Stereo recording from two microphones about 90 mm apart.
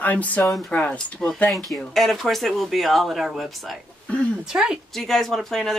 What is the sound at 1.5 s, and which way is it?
A woman's voice, centre (ahead or behind).